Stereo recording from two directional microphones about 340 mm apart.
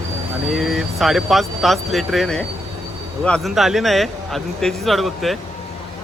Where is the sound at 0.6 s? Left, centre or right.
Centre.